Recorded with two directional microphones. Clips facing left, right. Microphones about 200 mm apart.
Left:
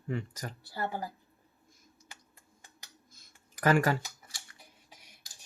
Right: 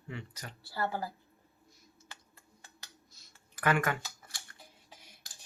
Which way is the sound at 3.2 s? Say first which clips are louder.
Left 1 dB; 50° left (ahead or behind).